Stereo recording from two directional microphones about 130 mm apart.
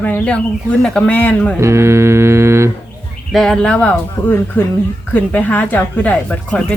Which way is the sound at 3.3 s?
5° left (ahead or behind).